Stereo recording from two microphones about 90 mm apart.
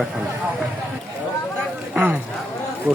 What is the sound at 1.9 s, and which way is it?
Speech, 15° right (ahead or behind).